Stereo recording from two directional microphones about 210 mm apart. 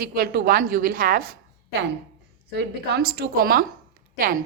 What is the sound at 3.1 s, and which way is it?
Speech, 45° right (ahead or behind).